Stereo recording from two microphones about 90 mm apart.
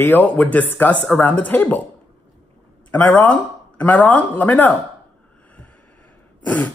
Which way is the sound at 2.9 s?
15° left (ahead or behind).